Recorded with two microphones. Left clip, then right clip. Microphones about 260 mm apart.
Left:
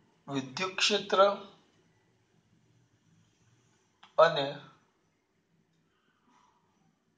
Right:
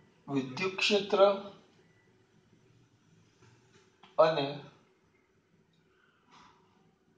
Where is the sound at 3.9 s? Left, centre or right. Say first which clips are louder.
Left 2 dB; left.